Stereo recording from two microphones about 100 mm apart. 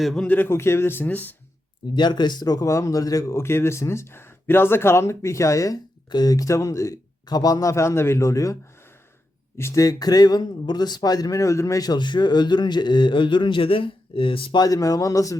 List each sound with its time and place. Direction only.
0.0 s speech: 5° left (ahead or behind)
0.3 s speech: 20° left (ahead or behind)
2.0 s a man's voice: 50° left (ahead or behind)
14.6 s a man's voice: 35° left (ahead or behind)